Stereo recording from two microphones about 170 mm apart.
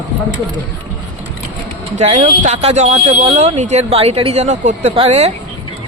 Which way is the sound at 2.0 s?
45° right (ahead or behind).